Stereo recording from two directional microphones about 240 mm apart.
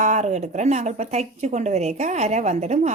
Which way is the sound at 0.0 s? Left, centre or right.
Right.